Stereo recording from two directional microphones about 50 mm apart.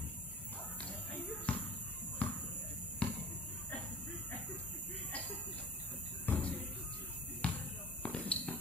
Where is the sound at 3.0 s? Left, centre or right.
Left.